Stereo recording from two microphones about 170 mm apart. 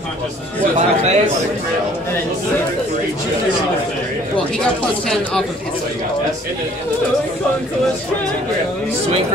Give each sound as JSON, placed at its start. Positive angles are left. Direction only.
{"t": 0.7, "sound": "a man's voice", "side_deg": -40}
{"t": 5.0, "sound": "speech", "side_deg": 5}